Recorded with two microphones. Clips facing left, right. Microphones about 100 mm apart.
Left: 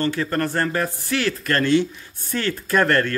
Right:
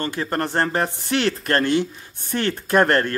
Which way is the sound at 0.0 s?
20° right (ahead or behind).